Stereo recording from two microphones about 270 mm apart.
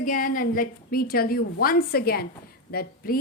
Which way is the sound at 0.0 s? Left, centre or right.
Left.